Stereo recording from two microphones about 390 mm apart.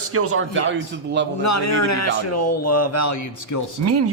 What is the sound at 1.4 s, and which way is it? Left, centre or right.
Speech, left.